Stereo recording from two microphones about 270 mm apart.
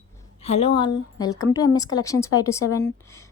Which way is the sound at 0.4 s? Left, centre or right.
Left.